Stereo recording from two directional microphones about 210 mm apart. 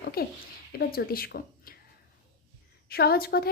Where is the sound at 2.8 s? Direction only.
45° left (ahead or behind).